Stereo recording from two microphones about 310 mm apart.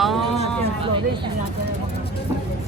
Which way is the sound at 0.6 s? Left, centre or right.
Centre.